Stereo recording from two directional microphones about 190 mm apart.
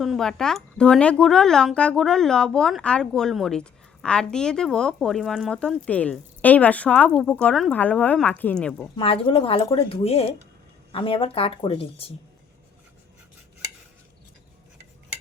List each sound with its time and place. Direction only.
0.0 s speech: centre (ahead or behind)
9.0 s speech: 25° left (ahead or behind)